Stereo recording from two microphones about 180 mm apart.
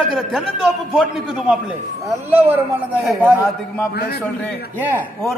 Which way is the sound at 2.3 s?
10° right (ahead or behind).